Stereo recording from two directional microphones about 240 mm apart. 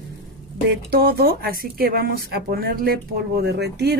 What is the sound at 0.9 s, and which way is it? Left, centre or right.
Speech, right.